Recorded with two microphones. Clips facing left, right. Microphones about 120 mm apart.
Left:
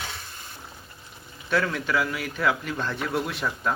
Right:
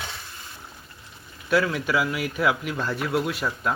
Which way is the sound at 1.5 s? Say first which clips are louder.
Right 2 dB; 10° right (ahead or behind).